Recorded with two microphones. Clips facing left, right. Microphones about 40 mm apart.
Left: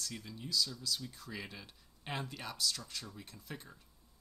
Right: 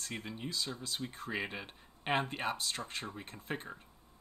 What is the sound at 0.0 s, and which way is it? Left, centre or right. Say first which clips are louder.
Speech: right 4 dB; right.